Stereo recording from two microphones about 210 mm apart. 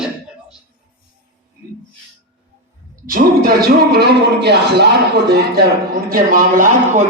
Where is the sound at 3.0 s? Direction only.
45° right (ahead or behind).